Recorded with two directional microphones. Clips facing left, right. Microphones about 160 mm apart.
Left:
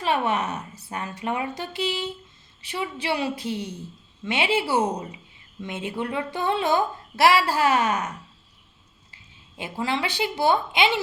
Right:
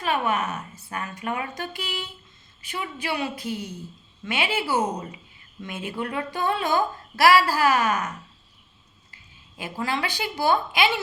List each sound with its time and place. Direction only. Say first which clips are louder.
0.0 s a woman's voice: left 1 dB; 30° left (ahead or behind)
9.6 s a woman's voice: left 1 dB; 20° left (ahead or behind)